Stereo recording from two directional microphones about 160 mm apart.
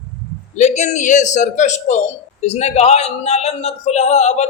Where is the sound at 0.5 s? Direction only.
45° left (ahead or behind).